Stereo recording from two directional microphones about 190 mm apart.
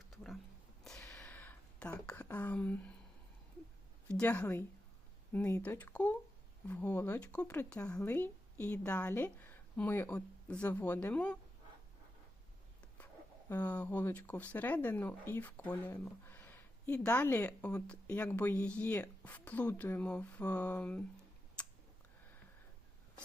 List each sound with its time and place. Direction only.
0.1 s whispering: centre (ahead or behind)
0.9 s a sound: 5° left (ahead or behind)
4.1 s speech: 10° left (ahead or behind)
13.5 s speech: 10° left (ahead or behind)
21.6 s clicking: 5° left (ahead or behind)